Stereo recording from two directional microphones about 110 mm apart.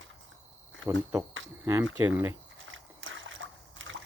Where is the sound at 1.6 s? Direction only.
25° right (ahead or behind).